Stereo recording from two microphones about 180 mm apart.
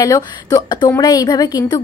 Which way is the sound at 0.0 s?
20° left (ahead or behind).